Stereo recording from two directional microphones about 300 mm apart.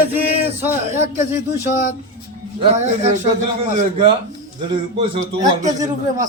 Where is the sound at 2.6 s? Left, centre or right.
Right.